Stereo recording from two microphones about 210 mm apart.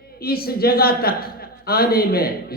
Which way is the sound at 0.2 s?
45° left (ahead or behind).